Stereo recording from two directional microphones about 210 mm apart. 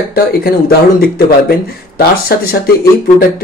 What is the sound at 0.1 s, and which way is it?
Speech, 45° left (ahead or behind).